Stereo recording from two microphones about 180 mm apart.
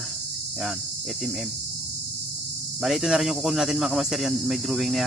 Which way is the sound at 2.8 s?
Centre (ahead or behind).